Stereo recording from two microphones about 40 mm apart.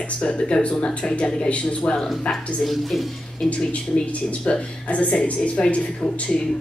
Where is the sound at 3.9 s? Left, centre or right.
Left.